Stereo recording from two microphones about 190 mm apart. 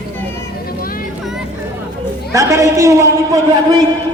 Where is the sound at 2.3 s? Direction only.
15° right (ahead or behind).